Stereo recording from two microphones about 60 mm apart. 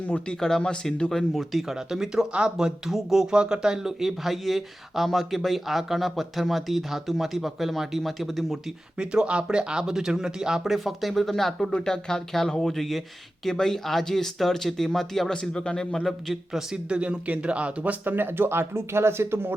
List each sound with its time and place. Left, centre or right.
0.0 s speech: left
0.3 s a man's voice: centre
1.3 s speech: centre
9.0 s a man's voice: centre
16.9 s speech: centre
18.0 s speech: right